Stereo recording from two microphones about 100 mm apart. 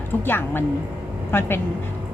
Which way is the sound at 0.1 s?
20° left (ahead or behind).